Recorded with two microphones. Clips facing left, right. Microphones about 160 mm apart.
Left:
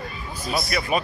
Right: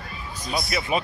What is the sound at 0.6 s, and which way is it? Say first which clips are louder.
Speech: left 1 dB; 25° right (ahead or behind).